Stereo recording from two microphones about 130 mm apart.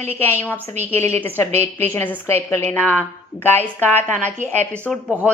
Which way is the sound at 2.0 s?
15° left (ahead or behind).